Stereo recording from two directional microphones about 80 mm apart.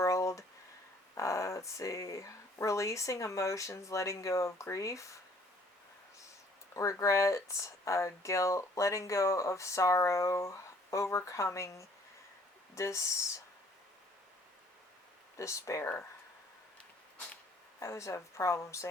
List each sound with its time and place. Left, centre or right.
0.0 s a sound: left
1.1 s speech: left
6.7 s speech: left
15.4 s speech: left
17.7 s speech: left